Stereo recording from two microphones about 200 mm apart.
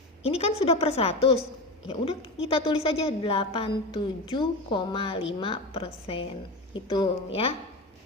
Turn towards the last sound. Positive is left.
turn(degrees=30)  # may be behind; listen again after turning